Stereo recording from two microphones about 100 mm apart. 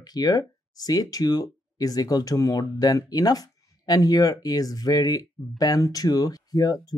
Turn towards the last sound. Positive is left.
turn(degrees=40)  # may be behind; listen again after turning